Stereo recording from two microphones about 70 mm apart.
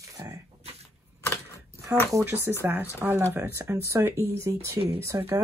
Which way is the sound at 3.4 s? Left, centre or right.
Right.